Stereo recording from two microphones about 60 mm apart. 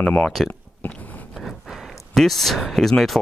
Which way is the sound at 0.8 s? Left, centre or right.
Left.